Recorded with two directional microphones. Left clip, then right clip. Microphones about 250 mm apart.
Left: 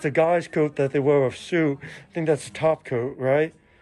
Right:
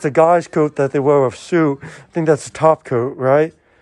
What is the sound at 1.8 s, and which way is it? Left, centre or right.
Speech, right.